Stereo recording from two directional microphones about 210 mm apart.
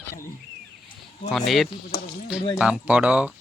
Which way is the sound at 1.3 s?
Centre (ahead or behind).